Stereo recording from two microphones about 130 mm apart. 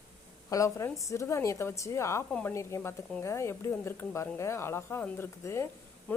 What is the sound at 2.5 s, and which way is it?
Speech, 20° left (ahead or behind).